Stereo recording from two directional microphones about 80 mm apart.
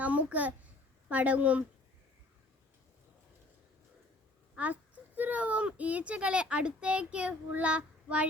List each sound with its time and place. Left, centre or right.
0.0 s a child's voice: centre
4.5 s a child's voice: centre